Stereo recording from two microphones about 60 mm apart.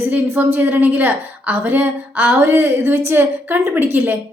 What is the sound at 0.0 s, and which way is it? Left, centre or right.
A woman's voice, right.